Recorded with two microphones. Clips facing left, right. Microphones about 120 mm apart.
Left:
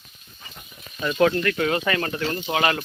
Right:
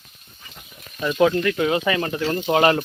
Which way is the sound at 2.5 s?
30° right (ahead or behind).